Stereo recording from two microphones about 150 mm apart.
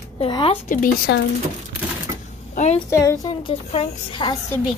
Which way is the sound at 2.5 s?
50° left (ahead or behind).